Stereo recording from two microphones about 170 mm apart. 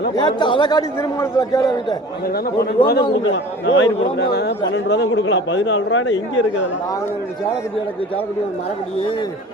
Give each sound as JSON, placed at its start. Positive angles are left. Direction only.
{"t": 0.2, "sound": "a man's voice", "side_deg": 25}
{"t": 2.3, "sound": "a man's voice", "side_deg": 60}
{"t": 3.3, "sound": "a man's voice", "side_deg": 90}
{"t": 4.2, "sound": "speech", "side_deg": 80}
{"t": 4.7, "sound": "a man's voice", "side_deg": 90}